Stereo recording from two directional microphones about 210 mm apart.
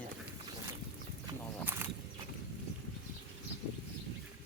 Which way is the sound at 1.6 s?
10° right (ahead or behind).